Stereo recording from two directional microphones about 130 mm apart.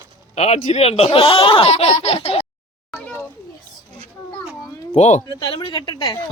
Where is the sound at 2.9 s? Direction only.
5° left (ahead or behind).